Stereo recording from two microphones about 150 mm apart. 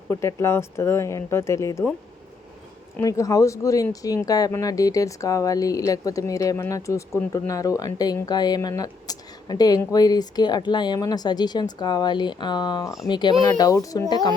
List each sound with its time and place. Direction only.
0.1 s speech: 20° left (ahead or behind)
3.0 s speech: 25° left (ahead or behind)